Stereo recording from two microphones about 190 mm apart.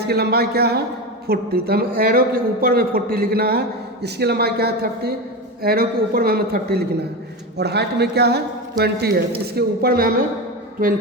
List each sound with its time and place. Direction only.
0.0 s a man's voice: 55° right (ahead or behind)